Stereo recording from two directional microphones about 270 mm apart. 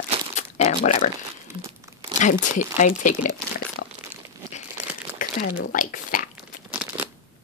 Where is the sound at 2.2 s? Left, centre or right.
Left.